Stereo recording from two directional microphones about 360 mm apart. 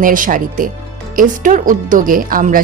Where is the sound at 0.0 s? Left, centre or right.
Right.